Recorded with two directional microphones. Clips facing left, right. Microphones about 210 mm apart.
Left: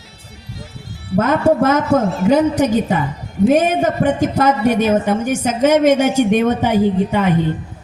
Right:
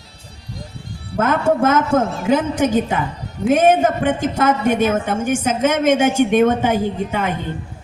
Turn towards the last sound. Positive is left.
turn(degrees=-50)  # may be behind; listen again after turning